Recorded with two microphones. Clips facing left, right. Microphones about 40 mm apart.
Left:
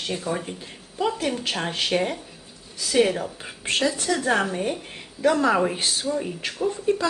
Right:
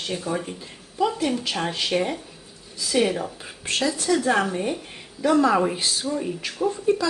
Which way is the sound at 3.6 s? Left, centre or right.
Left.